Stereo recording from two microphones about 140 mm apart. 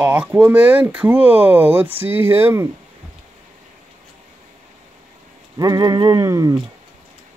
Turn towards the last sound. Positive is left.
turn(degrees=-25)  # may be behind; listen again after turning